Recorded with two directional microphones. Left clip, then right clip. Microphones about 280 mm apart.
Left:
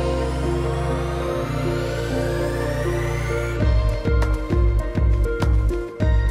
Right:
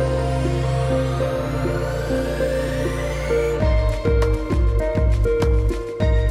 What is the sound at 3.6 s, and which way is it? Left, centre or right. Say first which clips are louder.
Music: right 4 dB; centre.